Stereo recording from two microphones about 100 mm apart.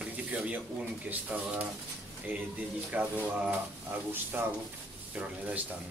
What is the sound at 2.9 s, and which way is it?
Speech, 15° right (ahead or behind).